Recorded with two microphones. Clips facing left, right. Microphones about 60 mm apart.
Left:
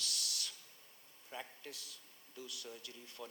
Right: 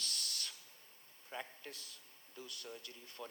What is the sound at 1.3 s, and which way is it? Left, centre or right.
Speech, right.